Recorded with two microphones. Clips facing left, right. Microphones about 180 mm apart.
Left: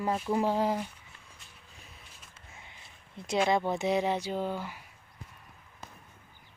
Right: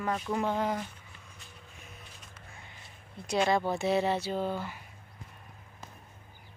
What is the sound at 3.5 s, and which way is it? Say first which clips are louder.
Speech: even; 20° left (ahead or behind).